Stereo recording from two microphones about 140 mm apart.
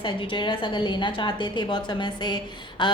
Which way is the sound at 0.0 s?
35° left (ahead or behind).